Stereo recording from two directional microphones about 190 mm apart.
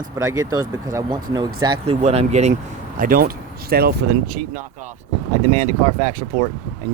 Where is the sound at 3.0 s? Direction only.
50° right (ahead or behind).